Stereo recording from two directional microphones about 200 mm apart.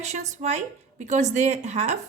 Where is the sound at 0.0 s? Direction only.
35° right (ahead or behind).